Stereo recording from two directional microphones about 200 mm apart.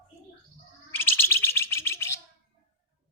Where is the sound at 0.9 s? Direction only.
10° left (ahead or behind).